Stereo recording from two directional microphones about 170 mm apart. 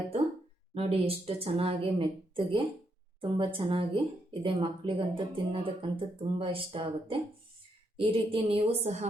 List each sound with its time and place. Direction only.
0.7 s speech: 35° right (ahead or behind)